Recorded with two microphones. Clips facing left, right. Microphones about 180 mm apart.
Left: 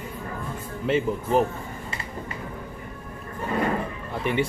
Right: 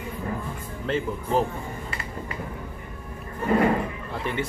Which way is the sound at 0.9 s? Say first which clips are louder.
Left 3 dB; 15° left (ahead or behind).